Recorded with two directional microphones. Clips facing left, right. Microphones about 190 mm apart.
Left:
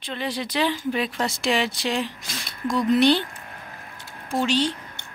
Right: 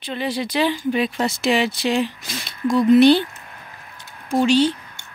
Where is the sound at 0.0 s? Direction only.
5° right (ahead or behind).